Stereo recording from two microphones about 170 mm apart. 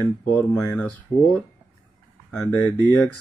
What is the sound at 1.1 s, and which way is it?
Speech, 45° left (ahead or behind).